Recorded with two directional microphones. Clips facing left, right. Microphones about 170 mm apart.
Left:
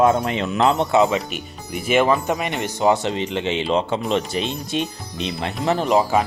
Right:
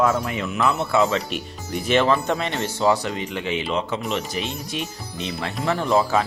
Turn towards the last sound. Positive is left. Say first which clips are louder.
# left 2 dB
turn(degrees=15)  # may be behind; listen again after turning